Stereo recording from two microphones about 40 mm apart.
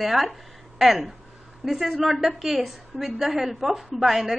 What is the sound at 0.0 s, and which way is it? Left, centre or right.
A woman's voice, centre.